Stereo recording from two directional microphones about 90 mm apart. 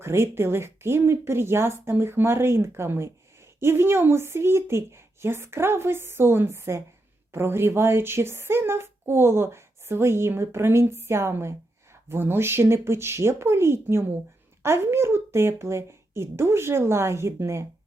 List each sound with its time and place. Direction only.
0.0 s speech: 30° right (ahead or behind)